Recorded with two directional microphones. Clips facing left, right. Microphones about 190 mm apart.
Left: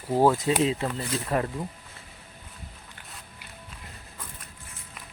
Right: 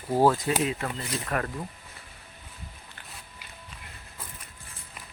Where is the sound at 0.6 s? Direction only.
25° left (ahead or behind).